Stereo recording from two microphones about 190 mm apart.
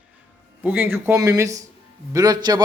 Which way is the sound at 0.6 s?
10° right (ahead or behind).